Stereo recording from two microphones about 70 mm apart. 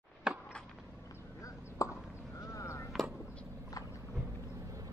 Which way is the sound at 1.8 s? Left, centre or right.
Left.